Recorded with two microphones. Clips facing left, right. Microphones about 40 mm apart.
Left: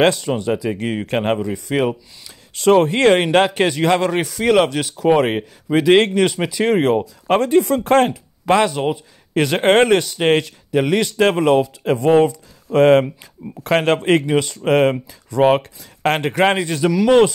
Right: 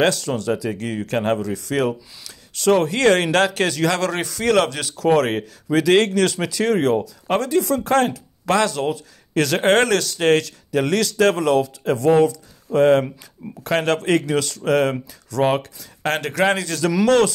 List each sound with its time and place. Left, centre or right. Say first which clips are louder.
0.5 s speech: left 2 dB; left
2.5 s speech: left 4 dB; left
8.1 s speech: left 4 dB; left
11.1 s speech: left 2 dB; left
12.7 s speech: left 3 dB; left